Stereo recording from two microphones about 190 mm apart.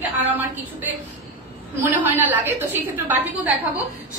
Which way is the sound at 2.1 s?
10° right (ahead or behind).